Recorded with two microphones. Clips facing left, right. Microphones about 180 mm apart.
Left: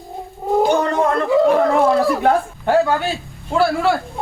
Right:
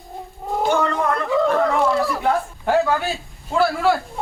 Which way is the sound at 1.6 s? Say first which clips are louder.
Left 4 dB; 45° left (ahead or behind).